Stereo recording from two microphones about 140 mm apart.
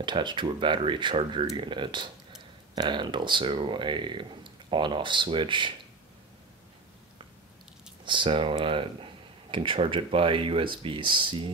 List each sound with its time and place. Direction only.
0.0 s speech: 35° right (ahead or behind)
8.0 s speech: 35° right (ahead or behind)